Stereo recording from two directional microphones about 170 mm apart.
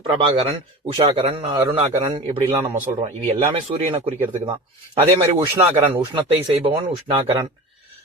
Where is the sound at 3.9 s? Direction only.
30° right (ahead or behind).